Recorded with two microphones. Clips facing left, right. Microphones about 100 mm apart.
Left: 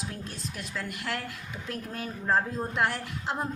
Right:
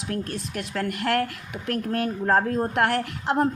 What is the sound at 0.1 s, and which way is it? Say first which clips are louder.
A woman's voice: right 9 dB; 60° right (ahead or behind).